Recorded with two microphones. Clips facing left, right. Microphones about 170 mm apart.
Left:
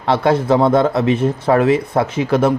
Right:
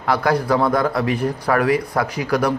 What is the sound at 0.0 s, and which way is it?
Speech, 25° left (ahead or behind).